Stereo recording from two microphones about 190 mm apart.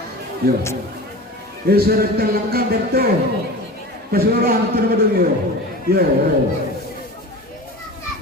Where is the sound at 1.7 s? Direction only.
55° right (ahead or behind).